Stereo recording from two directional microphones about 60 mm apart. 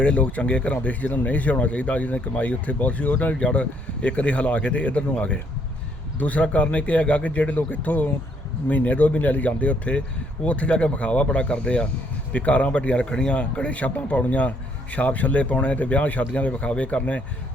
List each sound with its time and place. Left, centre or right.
0.0 s speech: left